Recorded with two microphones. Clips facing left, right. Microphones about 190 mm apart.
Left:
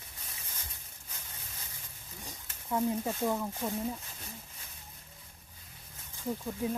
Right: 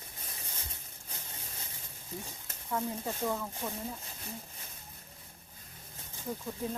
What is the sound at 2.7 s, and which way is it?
Speech, 20° left (ahead or behind).